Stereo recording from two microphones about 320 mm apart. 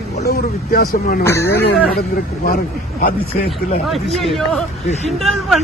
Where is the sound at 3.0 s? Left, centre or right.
Left.